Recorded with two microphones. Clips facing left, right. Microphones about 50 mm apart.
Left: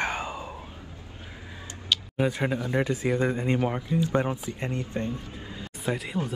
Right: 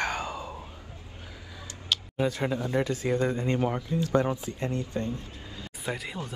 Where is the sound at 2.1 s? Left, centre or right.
Left.